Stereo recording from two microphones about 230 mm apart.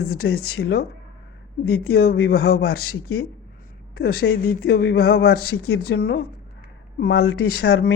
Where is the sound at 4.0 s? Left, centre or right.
Left.